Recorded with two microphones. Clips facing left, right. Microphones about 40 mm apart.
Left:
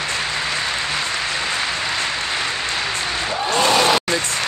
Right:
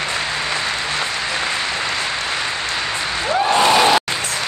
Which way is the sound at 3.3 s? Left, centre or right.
Right.